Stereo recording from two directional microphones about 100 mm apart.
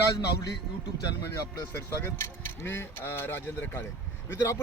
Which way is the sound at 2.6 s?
25° left (ahead or behind).